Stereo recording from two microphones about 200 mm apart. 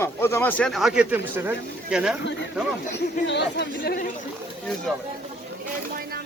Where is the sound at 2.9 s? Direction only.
60° left (ahead or behind).